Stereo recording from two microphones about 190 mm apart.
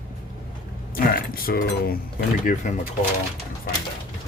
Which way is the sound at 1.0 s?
50° left (ahead or behind).